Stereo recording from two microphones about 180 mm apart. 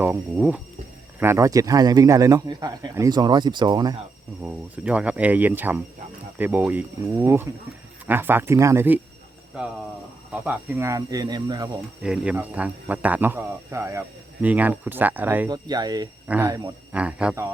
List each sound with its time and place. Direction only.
0.0 s a man's voice: 10° right (ahead or behind)
4.4 s a man's voice: 10° right (ahead or behind)
10.3 s a man's voice: 10° right (ahead or behind)
12.0 s a man's voice: 5° right (ahead or behind)
15.4 s a man's voice: 20° right (ahead or behind)
16.2 s speech: 10° right (ahead or behind)
16.5 s a man's voice: 20° right (ahead or behind)
16.9 s a man's voice: 5° right (ahead or behind)